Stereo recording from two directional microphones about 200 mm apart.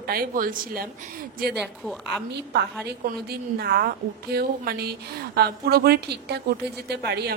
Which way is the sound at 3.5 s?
50° right (ahead or behind).